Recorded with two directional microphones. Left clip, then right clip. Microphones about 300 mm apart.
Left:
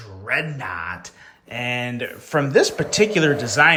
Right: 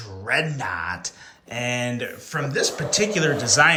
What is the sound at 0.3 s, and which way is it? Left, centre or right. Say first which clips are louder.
Speech: even; centre.